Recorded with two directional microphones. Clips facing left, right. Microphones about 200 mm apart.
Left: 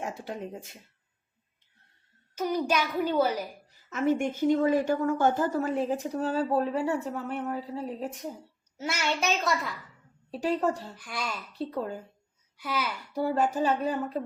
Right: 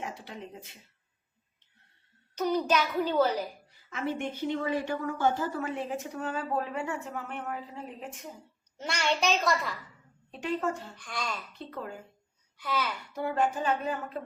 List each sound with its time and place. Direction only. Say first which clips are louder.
0.0 s speech: left 5 dB; 45° left (ahead or behind)
2.3 s a child's voice: even; 10° left (ahead or behind)
3.7 s a woman's voice: left 12 dB; 45° left (ahead or behind)
8.8 s a child's voice: right 1 dB; 5° left (ahead or behind)
10.3 s a woman's voice: left 4 dB; 35° left (ahead or behind)
10.9 s a child's voice: left 1 dB; 5° left (ahead or behind)
11.5 s a woman's voice: left 7 dB; 35° left (ahead or behind)
12.5 s a child's voice: even; 10° left (ahead or behind)
13.1 s a woman's voice: left 3 dB; 35° left (ahead or behind)